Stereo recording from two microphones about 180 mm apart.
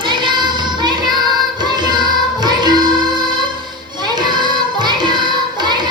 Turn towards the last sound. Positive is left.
turn(degrees=-25)  # may be behind; listen again after turning